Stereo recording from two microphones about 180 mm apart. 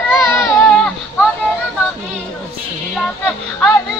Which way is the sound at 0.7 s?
5° left (ahead or behind).